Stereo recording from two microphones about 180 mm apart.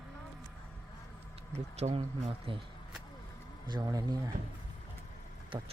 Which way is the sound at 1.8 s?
35° right (ahead or behind).